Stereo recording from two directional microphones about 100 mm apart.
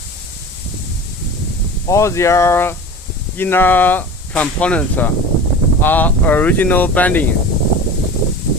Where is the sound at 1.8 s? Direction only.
30° left (ahead or behind).